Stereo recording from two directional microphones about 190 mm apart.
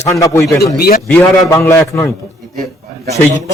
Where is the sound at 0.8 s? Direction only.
50° left (ahead or behind).